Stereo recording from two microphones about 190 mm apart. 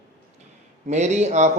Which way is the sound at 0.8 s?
35° right (ahead or behind).